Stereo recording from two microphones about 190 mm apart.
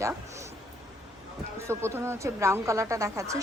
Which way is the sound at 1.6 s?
15° right (ahead or behind).